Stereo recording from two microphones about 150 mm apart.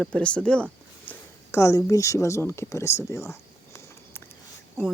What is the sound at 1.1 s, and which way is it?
Speech, 20° left (ahead or behind).